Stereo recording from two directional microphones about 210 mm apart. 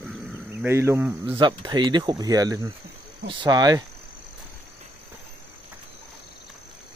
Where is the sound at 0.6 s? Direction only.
10° right (ahead or behind).